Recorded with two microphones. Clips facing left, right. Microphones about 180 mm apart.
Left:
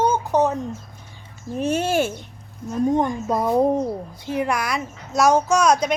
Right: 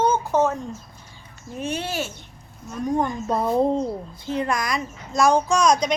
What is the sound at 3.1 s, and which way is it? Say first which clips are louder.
Speech: left 2 dB; 10° left (ahead or behind).